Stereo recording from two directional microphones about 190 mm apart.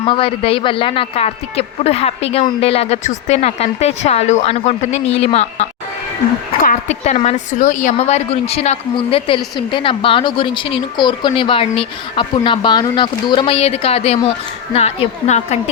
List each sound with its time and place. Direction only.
0.0 s a woman's voice: 25° left (ahead or behind)